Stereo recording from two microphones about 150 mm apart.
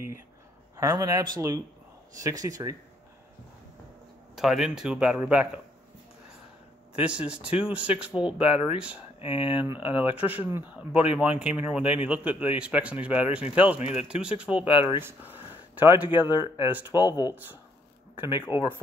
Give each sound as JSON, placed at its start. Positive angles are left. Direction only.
{"t": 0.7, "sound": "speech", "side_deg": -20}
{"t": 4.4, "sound": "speech", "side_deg": -5}
{"t": 7.0, "sound": "speech", "side_deg": -5}
{"t": 9.2, "sound": "speech", "side_deg": 35}
{"t": 9.7, "sound": "speech", "side_deg": -10}
{"t": 13.7, "sound": "speech", "side_deg": 50}
{"t": 14.0, "sound": "speech", "side_deg": -5}
{"t": 14.7, "sound": "speech", "side_deg": 35}
{"t": 15.0, "sound": "speech", "side_deg": -15}
{"t": 17.1, "sound": "speech", "side_deg": 25}
{"t": 18.1, "sound": "speech", "side_deg": -15}